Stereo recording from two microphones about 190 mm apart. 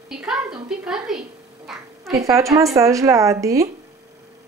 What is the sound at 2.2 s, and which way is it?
Speech, 15° right (ahead or behind).